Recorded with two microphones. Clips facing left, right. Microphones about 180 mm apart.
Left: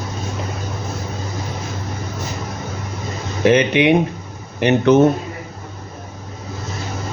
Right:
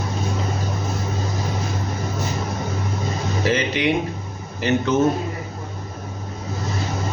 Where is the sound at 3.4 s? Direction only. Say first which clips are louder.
Left 8 dB; 65° left (ahead or behind).